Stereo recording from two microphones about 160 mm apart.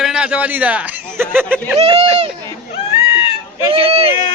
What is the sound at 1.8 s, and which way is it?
Speech, 40° right (ahead or behind).